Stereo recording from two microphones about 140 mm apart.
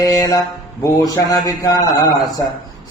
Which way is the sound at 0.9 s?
25° left (ahead or behind).